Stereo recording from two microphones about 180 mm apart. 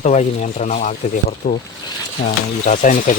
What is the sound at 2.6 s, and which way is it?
Speech, 45° left (ahead or behind).